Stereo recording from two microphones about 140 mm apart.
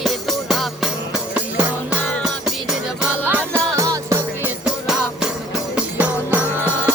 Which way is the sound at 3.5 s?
25° right (ahead or behind).